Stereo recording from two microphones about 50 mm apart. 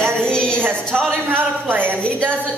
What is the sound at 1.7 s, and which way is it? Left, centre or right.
Speech, right.